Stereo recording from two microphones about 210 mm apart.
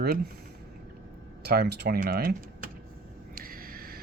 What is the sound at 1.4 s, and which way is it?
Speech, 50° right (ahead or behind).